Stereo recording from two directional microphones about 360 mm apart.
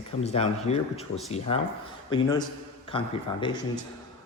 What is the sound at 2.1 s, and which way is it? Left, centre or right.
Speech, centre.